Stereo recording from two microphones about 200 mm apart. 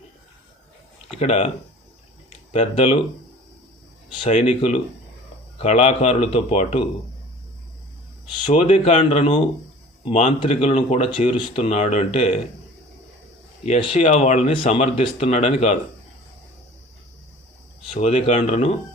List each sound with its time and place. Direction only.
1.2 s speech: 30° left (ahead or behind)
2.5 s speech: 30° left (ahead or behind)
4.1 s speech: 25° left (ahead or behind)
8.4 s speech: 35° left (ahead or behind)
13.7 s speech: 30° left (ahead or behind)
17.9 s speech: 35° left (ahead or behind)